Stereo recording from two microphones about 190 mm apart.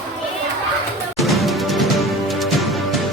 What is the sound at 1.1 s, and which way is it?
Music, centre (ahead or behind).